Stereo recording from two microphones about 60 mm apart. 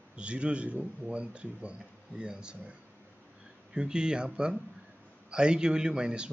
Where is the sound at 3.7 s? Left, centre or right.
Centre.